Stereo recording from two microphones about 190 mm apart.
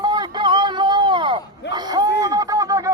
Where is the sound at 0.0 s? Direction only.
20° right (ahead or behind).